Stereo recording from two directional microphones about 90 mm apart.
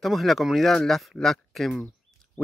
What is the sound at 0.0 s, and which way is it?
Speech, centre (ahead or behind).